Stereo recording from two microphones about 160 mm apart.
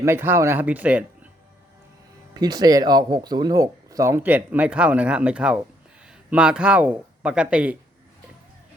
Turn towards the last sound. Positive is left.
turn(degrees=-5)  # may be behind; listen again after turning